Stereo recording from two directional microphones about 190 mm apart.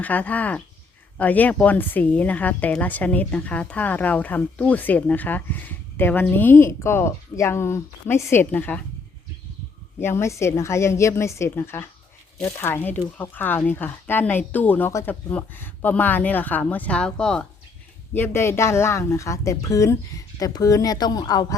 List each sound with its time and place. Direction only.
0.0 s a woman's voice: 10° left (ahead or behind)
10.0 s a woman's voice: 15° left (ahead or behind)